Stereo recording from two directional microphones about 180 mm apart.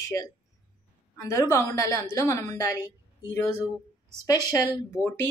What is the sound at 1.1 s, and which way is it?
Speech, 15° left (ahead or behind).